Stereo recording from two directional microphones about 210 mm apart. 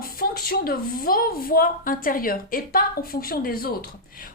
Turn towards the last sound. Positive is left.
turn(degrees=45)  # may be behind; listen again after turning